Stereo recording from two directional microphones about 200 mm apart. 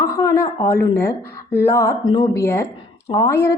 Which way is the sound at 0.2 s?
15° left (ahead or behind).